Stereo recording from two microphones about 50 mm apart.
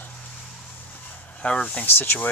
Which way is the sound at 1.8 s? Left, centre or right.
Left.